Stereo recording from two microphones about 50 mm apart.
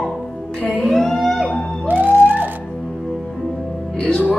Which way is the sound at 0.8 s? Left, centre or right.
Centre.